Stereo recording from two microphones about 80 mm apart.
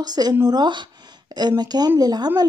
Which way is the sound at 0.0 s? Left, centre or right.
Right.